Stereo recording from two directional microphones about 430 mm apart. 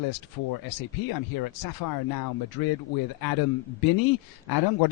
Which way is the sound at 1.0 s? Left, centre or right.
Left.